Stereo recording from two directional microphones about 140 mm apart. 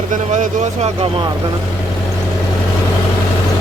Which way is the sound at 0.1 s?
55° right (ahead or behind).